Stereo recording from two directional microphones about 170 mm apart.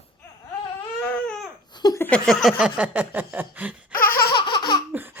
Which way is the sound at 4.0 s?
15° left (ahead or behind).